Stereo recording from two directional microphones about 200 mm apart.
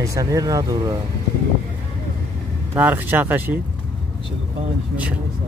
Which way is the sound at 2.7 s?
10° right (ahead or behind).